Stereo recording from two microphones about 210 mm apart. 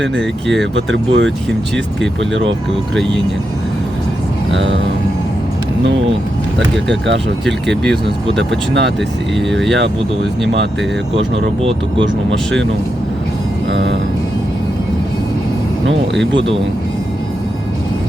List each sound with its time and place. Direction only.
0.2 s speech: centre (ahead or behind)
0.6 s speech: 60° right (ahead or behind)
4.5 s speech: 60° right (ahead or behind)
8.4 s speech: 60° right (ahead or behind)
9.3 s speech: centre (ahead or behind)